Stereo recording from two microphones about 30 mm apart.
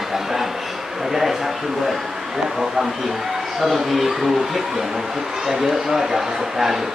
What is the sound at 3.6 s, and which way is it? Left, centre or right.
Speech, centre.